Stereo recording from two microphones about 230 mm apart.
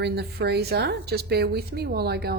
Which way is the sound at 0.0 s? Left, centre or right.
Right.